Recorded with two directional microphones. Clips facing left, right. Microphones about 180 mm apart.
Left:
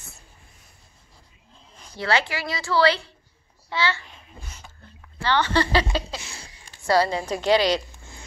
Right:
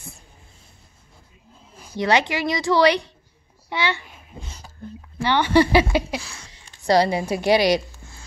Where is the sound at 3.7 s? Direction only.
15° right (ahead or behind).